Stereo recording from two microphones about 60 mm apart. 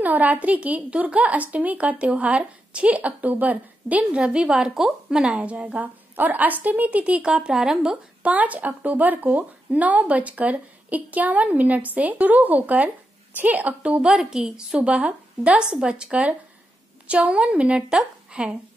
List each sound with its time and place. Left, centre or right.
0.0 s speech: right
4.2 s a woman's voice: centre
8.2 s speech: right
14.0 s a woman's voice: centre
14.8 s a woman's voice: right